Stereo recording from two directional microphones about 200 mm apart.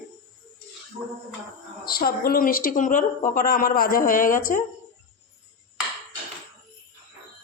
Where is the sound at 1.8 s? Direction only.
50° left (ahead or behind).